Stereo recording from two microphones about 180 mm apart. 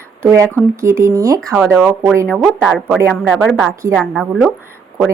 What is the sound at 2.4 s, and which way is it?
Speech, centre (ahead or behind).